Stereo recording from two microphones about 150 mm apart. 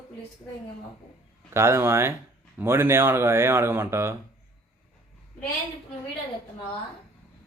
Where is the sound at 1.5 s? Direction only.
15° right (ahead or behind).